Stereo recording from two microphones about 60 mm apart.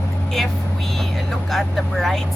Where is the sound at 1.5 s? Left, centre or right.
Centre.